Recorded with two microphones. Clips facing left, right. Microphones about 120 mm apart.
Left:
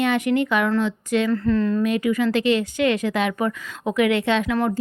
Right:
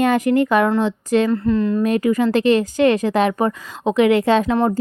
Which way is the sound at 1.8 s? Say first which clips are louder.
Right 3 dB; 40° right (ahead or behind).